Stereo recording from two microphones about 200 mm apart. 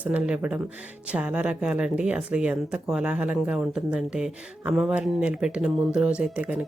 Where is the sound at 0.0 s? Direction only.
5° right (ahead or behind).